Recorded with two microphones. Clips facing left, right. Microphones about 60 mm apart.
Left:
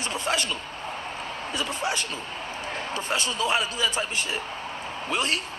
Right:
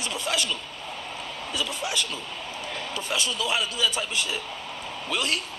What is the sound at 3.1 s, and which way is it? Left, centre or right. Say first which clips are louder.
A man's voice: left 2 dB; left.